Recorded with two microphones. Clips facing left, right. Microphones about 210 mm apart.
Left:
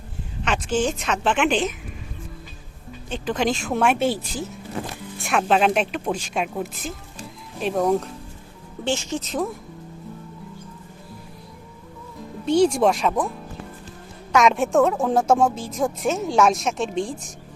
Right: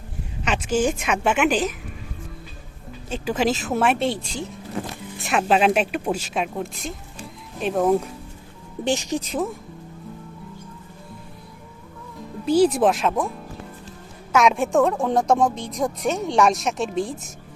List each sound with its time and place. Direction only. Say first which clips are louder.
0.4 s a woman's voice: right 1 dB; 5° right (ahead or behind)
3.1 s speech: right 1 dB; 5° right (ahead or behind)
5.2 s a woman's voice: right 1 dB; centre (ahead or behind)
12.5 s speech: even; 5° right (ahead or behind)